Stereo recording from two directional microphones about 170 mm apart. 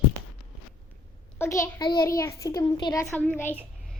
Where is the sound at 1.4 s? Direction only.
20° left (ahead or behind).